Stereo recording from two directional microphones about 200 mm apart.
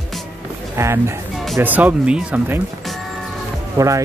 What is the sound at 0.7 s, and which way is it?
Speech, 15° right (ahead or behind).